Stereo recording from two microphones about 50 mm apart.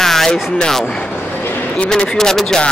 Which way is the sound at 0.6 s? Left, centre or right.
Centre.